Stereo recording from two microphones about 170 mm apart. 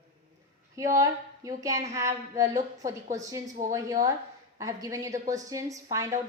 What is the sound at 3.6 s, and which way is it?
Speech, 50° right (ahead or behind).